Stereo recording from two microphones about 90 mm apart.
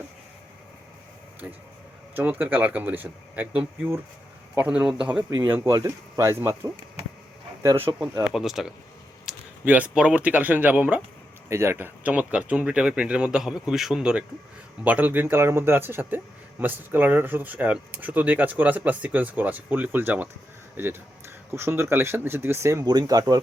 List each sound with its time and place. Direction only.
2.1 s speech: 20° right (ahead or behind)
5.7 s speech: 35° right (ahead or behind)
7.9 s speech: 30° right (ahead or behind)
8.2 s speech: 5° right (ahead or behind)
9.3 s a sound: 5° right (ahead or behind)
9.6 s speech: 15° right (ahead or behind)
11.4 s a man's voice: 30° right (ahead or behind)
12.0 s speech: 15° right (ahead or behind)
14.8 s speech: 20° right (ahead or behind)
21.5 s speech: 30° right (ahead or behind)
22.8 s speech: 50° right (ahead or behind)